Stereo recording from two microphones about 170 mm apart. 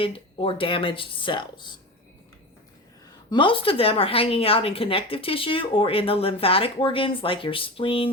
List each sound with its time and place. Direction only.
0.0 s speech: 30° left (ahead or behind)
3.2 s a woman's voice: 30° left (ahead or behind)